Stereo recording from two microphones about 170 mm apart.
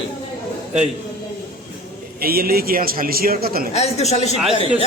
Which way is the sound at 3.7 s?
40° left (ahead or behind).